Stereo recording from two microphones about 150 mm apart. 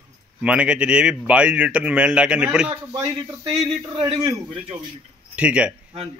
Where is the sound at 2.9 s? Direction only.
25° right (ahead or behind).